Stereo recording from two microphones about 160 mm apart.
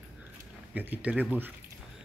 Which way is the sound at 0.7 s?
10° right (ahead or behind).